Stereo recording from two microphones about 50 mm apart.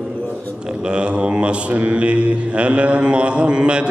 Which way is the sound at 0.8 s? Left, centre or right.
Right.